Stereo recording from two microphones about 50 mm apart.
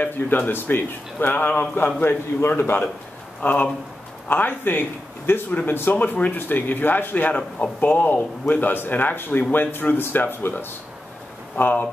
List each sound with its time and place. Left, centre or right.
0.0 s a man's voice: left
3.4 s a man's voice: left
7.8 s a man's voice: left
11.5 s a man's voice: left